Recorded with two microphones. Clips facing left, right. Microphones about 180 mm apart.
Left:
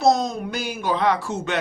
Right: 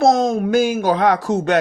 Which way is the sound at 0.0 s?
50° right (ahead or behind).